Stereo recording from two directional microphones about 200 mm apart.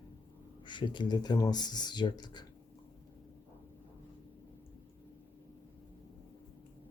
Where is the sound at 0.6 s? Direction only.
25° left (ahead or behind).